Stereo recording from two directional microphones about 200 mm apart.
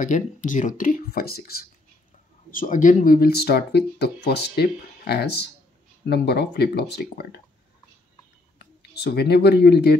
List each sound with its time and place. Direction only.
0.0 s speech: 40° left (ahead or behind)
8.5 s speech: 55° left (ahead or behind)